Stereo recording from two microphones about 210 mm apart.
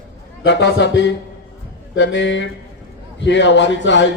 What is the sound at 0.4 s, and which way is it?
A man's voice, 55° left (ahead or behind).